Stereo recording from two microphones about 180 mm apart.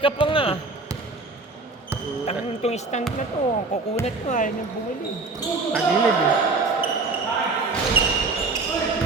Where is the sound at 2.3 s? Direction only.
35° left (ahead or behind).